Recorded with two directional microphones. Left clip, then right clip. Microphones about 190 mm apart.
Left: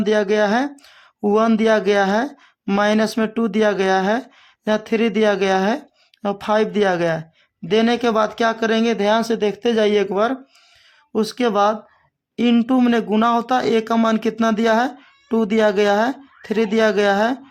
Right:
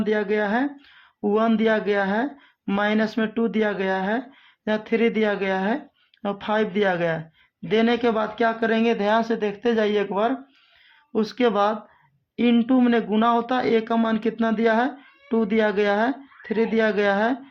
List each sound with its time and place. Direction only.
0.0 s speech: 40° left (ahead or behind)